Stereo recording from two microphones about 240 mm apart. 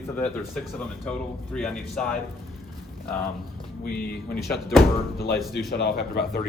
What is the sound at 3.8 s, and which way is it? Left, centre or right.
Speech, left.